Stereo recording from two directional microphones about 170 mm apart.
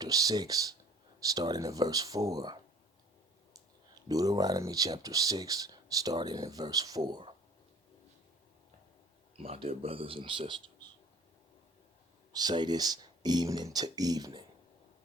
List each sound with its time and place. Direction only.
0.0 s speech: 20° right (ahead or behind)
9.4 s speech: 35° right (ahead or behind)
12.3 s speech: 25° right (ahead or behind)